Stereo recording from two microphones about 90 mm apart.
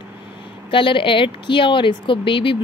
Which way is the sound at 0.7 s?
70° left (ahead or behind).